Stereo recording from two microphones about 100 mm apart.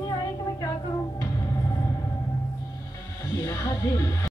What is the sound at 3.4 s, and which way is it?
Speech, 30° left (ahead or behind).